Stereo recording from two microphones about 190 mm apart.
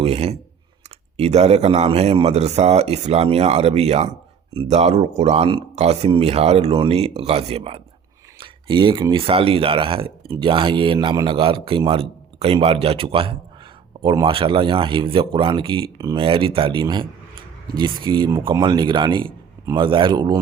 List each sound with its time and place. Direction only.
0.0 s speech: 35° right (ahead or behind)